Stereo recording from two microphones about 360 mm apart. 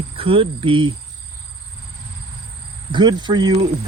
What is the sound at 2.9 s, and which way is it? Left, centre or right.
Cricket, centre.